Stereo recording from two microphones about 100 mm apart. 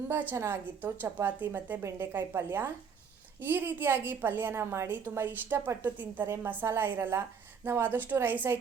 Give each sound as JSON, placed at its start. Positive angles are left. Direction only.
{"t": 0.1, "sound": "a woman's voice", "side_deg": -20}